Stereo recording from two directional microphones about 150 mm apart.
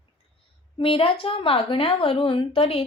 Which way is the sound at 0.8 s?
35° left (ahead or behind).